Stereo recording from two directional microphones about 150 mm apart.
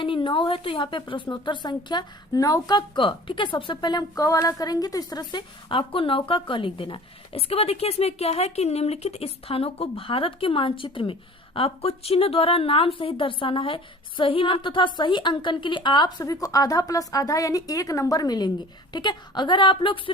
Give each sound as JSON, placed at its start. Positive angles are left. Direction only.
{"t": 0.0, "sound": "a woman's voice", "side_deg": 35}